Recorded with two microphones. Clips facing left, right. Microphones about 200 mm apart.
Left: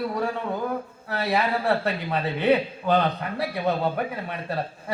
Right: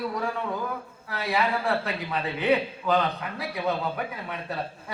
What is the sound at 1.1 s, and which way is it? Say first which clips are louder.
A man's voice: left 2 dB; 30° left (ahead or behind).